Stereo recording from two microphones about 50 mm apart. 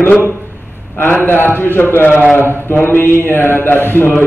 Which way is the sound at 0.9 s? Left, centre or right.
Left.